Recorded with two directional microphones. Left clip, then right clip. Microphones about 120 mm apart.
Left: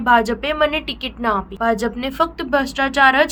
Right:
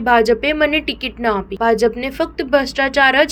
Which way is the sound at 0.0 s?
25° right (ahead or behind).